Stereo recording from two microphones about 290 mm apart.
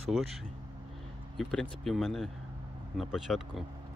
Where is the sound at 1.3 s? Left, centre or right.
Centre.